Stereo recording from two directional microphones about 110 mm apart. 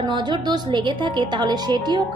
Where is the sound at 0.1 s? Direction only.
45° right (ahead or behind).